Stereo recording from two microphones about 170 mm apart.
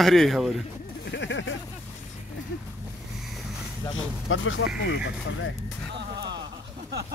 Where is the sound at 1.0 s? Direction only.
90° left.